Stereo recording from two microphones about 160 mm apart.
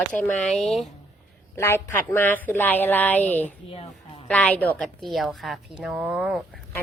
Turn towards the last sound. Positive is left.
turn(degrees=0)  # may be behind; listen again after turning